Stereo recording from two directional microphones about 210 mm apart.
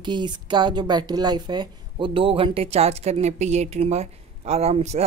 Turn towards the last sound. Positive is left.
turn(degrees=-30)  # may be behind; listen again after turning